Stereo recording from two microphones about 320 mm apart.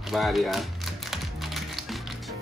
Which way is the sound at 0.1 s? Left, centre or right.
Centre.